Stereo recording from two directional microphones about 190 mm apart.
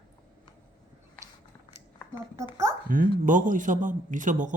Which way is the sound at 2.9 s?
45° right (ahead or behind).